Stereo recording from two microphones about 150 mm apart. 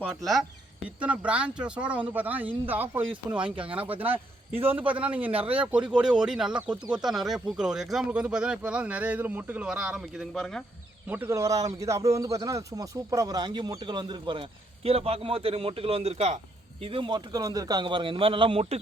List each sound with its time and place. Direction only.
0.9 s speech: 10° right (ahead or behind)
5.3 s speech: 40° right (ahead or behind)
5.9 s speech: 5° right (ahead or behind)
11.1 s speech: 15° right (ahead or behind)
14.8 s speech: 40° right (ahead or behind)
16.8 s speech: 35° right (ahead or behind)